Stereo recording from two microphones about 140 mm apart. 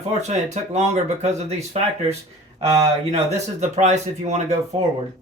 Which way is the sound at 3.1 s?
55° right (ahead or behind).